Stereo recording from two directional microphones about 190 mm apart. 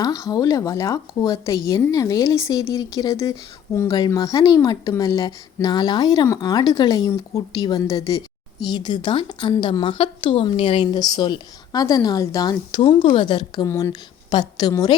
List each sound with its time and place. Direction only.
0.0 s speech: 20° left (ahead or behind)